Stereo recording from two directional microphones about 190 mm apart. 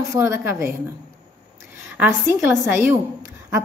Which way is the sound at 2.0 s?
10° right (ahead or behind).